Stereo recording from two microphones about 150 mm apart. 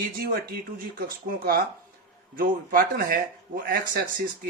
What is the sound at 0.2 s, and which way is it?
Speech, 85° right.